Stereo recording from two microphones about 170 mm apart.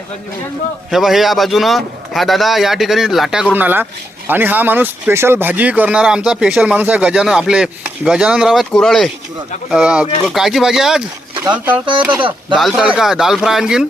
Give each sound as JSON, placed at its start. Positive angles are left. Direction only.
{"t": 0.9, "sound": "speech", "side_deg": 0}
{"t": 12.1, "sound": "speech", "side_deg": -30}
{"t": 12.5, "sound": "speech", "side_deg": 0}